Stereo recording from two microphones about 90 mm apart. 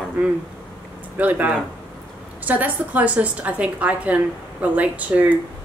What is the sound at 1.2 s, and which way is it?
A woman's voice, 20° right (ahead or behind).